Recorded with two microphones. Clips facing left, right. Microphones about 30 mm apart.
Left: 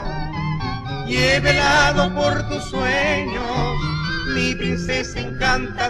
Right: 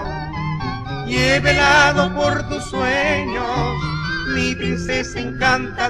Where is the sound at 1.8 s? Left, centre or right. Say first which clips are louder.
Right 2 dB; centre.